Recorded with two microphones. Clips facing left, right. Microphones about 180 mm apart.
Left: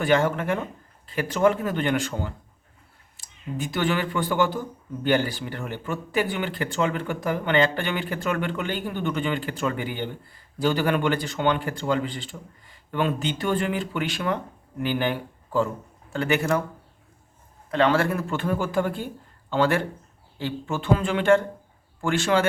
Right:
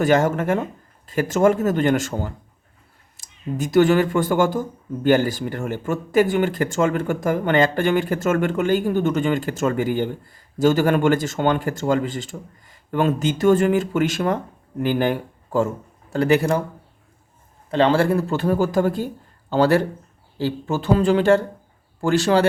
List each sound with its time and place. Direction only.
0.0 s a man's voice: 40° right (ahead or behind)
17.7 s speech: 30° right (ahead or behind)